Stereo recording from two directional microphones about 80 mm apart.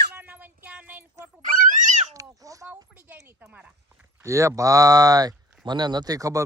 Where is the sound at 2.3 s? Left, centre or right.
Right.